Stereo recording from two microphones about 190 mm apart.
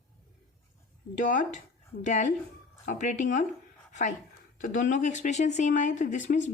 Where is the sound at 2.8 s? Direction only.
40° left (ahead or behind).